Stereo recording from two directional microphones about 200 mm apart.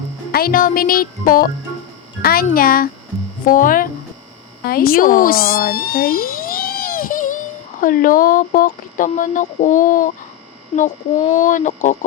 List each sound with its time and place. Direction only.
0.3 s a child's voice: 50° left (ahead or behind)